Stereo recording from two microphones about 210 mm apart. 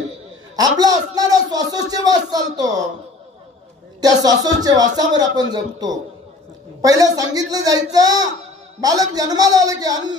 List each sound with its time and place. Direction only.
0.6 s a man's voice: 15° right (ahead or behind)
4.0 s a man's voice: 15° right (ahead or behind)